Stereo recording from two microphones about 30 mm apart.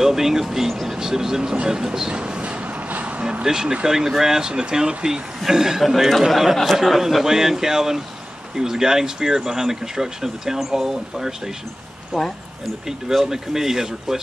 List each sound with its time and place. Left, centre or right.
0.0 s speech: centre; by 2.7 s right
2.9 s vehicle: right
3.4 s speech: right
4.6 s speech: right; by 6.5 s centre
6.5 s speech: centre